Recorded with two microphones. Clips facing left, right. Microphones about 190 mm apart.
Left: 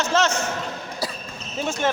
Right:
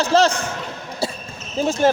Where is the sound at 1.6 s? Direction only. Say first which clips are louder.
Right 7 dB; 35° right (ahead or behind).